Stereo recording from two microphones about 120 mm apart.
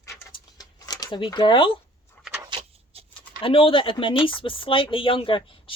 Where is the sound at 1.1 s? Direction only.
40° left (ahead or behind).